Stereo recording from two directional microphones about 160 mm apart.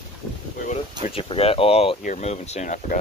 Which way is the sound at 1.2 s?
35° left (ahead or behind).